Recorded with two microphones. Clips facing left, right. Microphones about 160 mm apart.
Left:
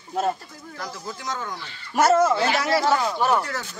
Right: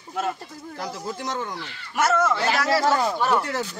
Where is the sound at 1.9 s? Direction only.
35° left (ahead or behind).